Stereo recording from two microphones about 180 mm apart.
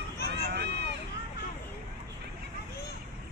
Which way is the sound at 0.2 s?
75° right (ahead or behind).